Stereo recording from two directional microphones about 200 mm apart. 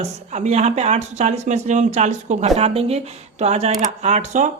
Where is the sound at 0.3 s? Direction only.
35° right (ahead or behind).